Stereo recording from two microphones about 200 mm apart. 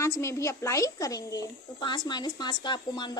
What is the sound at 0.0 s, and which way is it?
A woman's voice, 15° left (ahead or behind).